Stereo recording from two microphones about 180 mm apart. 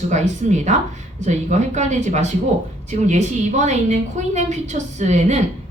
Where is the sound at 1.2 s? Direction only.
40° right (ahead or behind).